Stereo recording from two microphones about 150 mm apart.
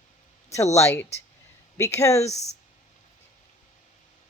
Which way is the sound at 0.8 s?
15° left (ahead or behind).